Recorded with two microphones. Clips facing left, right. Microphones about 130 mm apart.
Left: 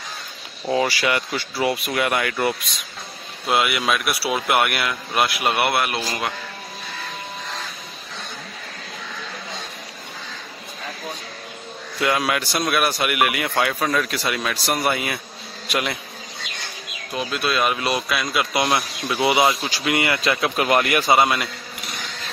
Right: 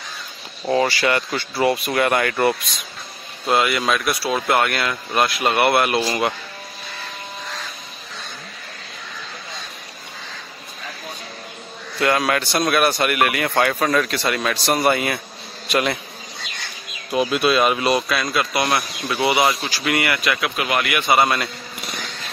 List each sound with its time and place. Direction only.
0.7 s speech: 10° left (ahead or behind)
12.0 s speech: 5° left (ahead or behind)
17.1 s speech: 10° right (ahead or behind); by 21.1 s 35° left (ahead or behind)